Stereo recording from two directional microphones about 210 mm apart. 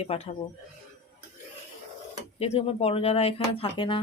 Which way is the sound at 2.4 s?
30° left (ahead or behind).